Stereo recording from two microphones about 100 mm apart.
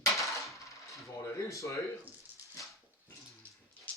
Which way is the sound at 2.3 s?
20° right (ahead or behind).